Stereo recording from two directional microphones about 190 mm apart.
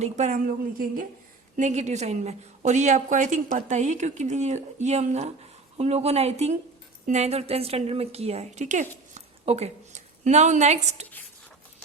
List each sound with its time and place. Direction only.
0.0 s a woman's voice: 40° right (ahead or behind)